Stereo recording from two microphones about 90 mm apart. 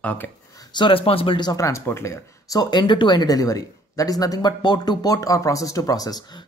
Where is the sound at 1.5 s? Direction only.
35° left (ahead or behind).